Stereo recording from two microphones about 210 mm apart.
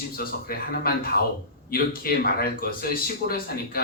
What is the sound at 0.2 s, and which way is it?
Speech, 45° left (ahead or behind).